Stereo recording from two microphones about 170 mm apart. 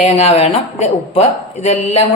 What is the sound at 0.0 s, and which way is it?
Speech, 40° left (ahead or behind).